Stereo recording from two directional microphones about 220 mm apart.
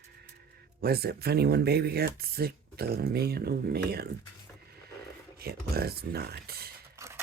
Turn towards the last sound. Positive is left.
turn(degrees=-10)  # may be behind; listen again after turning